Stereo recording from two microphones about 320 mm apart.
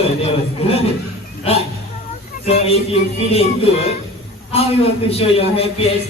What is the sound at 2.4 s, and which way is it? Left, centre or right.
A man's voice, centre.